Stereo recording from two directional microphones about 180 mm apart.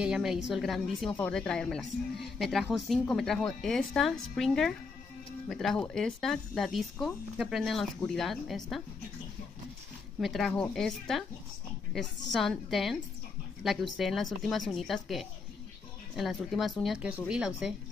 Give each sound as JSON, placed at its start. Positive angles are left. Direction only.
{"t": 0.0, "sound": "a woman's voice", "side_deg": -5}
{"t": 10.2, "sound": "a woman's voice", "side_deg": 0}